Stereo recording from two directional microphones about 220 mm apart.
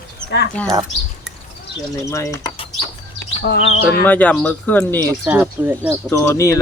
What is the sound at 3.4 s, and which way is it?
Speech, 55° left (ahead or behind).